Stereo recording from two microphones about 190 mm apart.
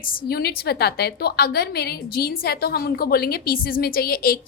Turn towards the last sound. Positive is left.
turn(degrees=50)  # may be behind; listen again after turning